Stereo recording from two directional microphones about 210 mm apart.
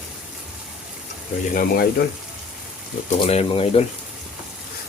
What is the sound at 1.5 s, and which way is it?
Speech, 45° left (ahead or behind).